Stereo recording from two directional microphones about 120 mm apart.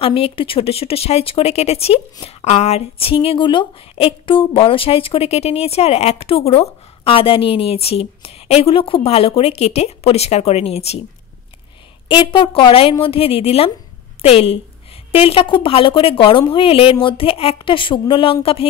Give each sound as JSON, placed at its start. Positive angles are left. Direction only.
{"t": 0.0, "sound": "speech", "side_deg": 50}
{"t": 12.1, "sound": "a woman's voice", "side_deg": 40}